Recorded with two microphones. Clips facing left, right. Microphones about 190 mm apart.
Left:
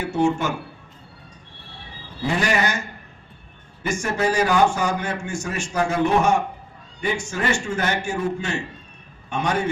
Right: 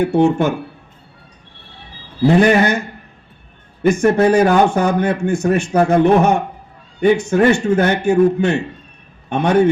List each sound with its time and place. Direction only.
0.0 s speech: 60° right (ahead or behind)
2.2 s speech: 60° right (ahead or behind)
3.8 s speech: 60° right (ahead or behind)